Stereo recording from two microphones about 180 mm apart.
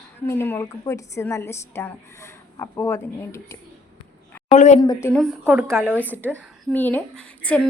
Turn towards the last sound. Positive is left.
turn(degrees=5)  # may be behind; listen again after turning